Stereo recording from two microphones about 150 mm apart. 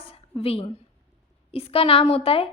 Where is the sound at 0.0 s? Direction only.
40° left (ahead or behind).